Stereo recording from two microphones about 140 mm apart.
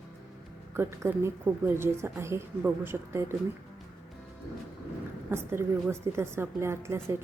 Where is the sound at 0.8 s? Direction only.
20° right (ahead or behind).